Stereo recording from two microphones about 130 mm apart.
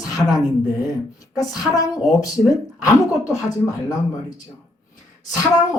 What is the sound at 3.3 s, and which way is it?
Speech, 30° left (ahead or behind).